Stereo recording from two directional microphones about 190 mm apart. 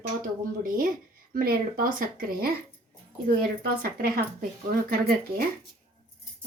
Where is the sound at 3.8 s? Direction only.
50° right (ahead or behind).